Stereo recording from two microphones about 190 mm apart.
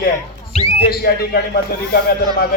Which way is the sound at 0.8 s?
55° left (ahead or behind).